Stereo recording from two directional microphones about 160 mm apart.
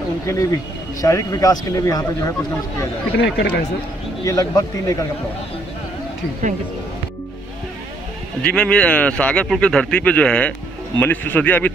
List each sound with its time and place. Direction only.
1.0 s speech: 20° left (ahead or behind)
3.2 s speech: 90° left
4.3 s speech: 20° left (ahead or behind)
8.4 s speech: 5° left (ahead or behind)